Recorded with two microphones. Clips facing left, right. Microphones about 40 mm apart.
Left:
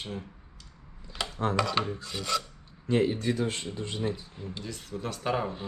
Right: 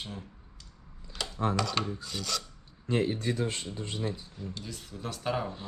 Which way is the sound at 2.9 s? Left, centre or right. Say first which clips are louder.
Left 3 dB; left.